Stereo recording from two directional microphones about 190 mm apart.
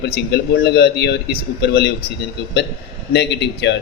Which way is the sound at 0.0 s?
60° left (ahead or behind).